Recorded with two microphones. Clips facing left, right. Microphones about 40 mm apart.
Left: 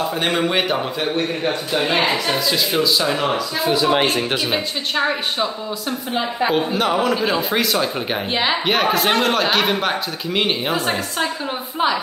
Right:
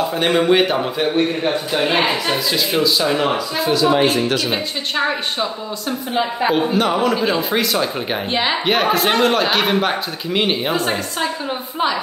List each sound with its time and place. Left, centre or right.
0.1 s a woman's voice: centre
3.9 s speech: left
4.5 s a woman's voice: centre